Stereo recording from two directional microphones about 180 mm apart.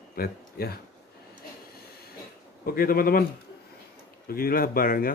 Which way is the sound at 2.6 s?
55° left (ahead or behind).